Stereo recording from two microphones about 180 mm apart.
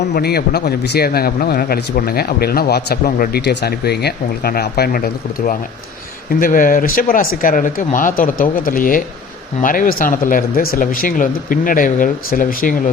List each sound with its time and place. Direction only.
0.1 s speech: 60° left (ahead or behind)